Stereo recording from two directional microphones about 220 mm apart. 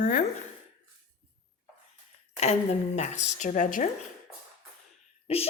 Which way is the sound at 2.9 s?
30° left (ahead or behind).